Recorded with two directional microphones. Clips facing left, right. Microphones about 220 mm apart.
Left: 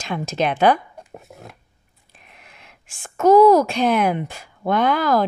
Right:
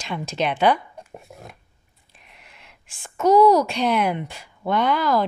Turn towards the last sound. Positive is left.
turn(degrees=45)  # may be behind; listen again after turning